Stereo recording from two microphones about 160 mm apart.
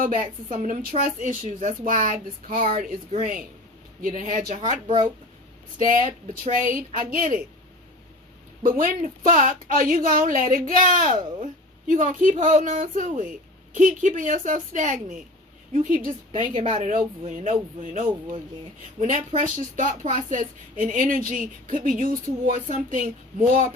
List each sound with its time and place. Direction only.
0.0 s speech: 55° right (ahead or behind)
4.0 s speech: 55° right (ahead or behind)
5.8 s speech: 55° right (ahead or behind)
8.6 s speech: 60° right (ahead or behind)
16.3 s speech: 35° right (ahead or behind); by 23.7 s 55° right (ahead or behind)